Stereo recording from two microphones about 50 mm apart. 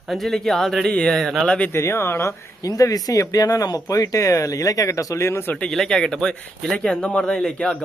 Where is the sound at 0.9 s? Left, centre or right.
Centre.